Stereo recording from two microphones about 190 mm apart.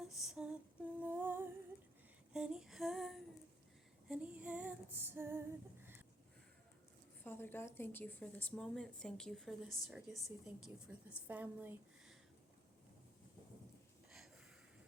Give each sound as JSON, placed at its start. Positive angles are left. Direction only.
{"t": 0.0, "sound": "female singing", "side_deg": 0}
{"t": 2.3, "sound": "a woman's voice", "side_deg": -5}
{"t": 4.1, "sound": "female singing", "side_deg": -5}
{"t": 7.3, "sound": "a woman's voice", "side_deg": 10}
{"t": 14.1, "sound": "gasp", "side_deg": 0}